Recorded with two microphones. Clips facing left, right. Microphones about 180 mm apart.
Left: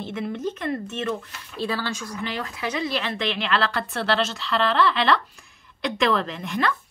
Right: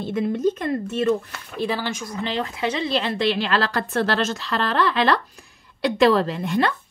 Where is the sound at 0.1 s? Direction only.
40° right (ahead or behind).